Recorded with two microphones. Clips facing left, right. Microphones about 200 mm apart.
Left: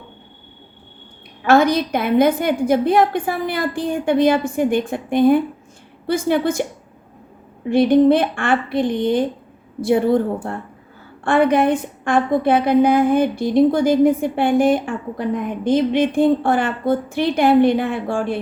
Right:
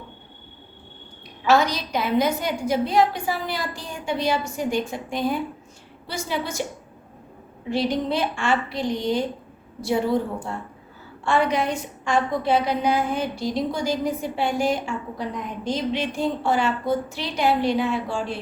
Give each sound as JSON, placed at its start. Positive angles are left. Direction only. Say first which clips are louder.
{"t": 1.5, "sound": "a woman's voice", "louder": "left 6 dB", "side_deg": 55}
{"t": 7.7, "sound": "a woman's voice", "louder": "left 11 dB", "side_deg": 55}